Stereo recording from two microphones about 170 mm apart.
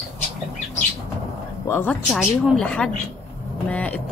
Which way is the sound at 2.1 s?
Centre (ahead or behind).